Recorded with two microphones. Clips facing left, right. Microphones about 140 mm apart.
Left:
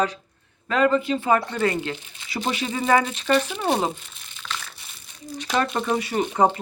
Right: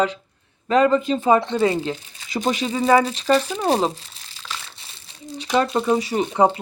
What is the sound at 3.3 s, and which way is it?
Speech, 35° right (ahead or behind).